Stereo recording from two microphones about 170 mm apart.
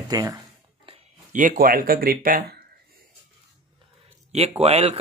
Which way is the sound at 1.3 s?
50° right (ahead or behind).